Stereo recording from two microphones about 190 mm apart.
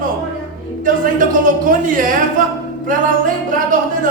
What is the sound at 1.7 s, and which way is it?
Speech, 45° right (ahead or behind).